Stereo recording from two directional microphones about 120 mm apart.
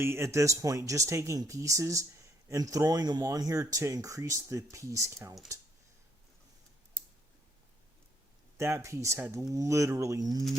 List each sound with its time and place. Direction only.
0.0 s speech: 20° right (ahead or behind)
8.5 s speech: 25° right (ahead or behind)